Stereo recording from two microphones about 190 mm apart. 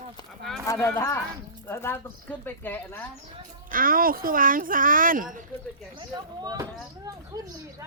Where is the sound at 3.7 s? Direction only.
50° right (ahead or behind).